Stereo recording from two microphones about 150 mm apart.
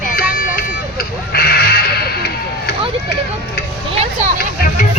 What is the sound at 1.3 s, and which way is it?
Music, 90° left.